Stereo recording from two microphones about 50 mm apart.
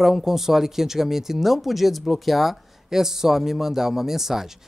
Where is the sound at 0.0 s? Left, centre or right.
Centre.